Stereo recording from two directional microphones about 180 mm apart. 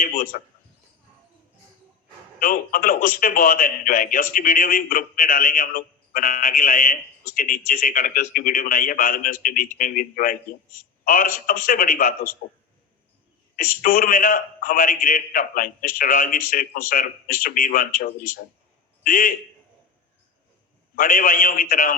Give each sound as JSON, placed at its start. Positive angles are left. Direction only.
{"t": 0.0, "sound": "speech", "side_deg": 50}
{"t": 2.4, "sound": "speech", "side_deg": 50}
{"t": 13.6, "sound": "speech", "side_deg": 50}
{"t": 20.9, "sound": "speech", "side_deg": 50}